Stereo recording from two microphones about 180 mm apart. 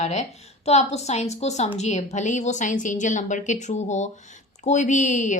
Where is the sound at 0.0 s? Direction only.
40° left (ahead or behind).